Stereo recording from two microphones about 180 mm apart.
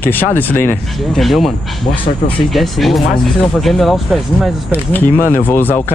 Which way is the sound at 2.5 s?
Centre (ahead or behind).